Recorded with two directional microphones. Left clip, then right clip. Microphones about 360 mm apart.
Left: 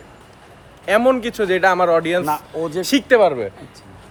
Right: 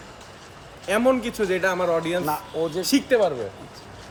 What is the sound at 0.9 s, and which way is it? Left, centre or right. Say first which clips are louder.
Speech: left 5 dB; centre.